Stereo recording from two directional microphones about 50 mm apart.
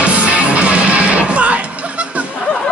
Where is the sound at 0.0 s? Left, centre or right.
Right.